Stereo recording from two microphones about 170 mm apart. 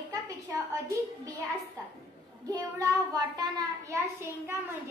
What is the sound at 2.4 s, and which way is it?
A child's voice, 20° right (ahead or behind).